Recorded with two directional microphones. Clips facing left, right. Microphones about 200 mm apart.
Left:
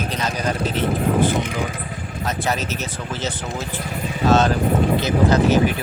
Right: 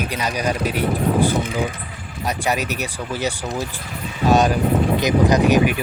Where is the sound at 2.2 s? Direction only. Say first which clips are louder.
Right 2 dB; 15° right (ahead or behind).